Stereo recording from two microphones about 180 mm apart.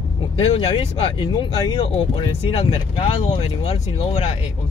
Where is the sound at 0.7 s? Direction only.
30° left (ahead or behind).